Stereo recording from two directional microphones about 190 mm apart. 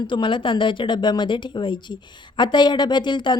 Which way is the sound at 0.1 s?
25° left (ahead or behind).